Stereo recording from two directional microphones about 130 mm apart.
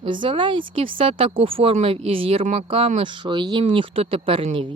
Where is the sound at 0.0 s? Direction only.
40° right (ahead or behind).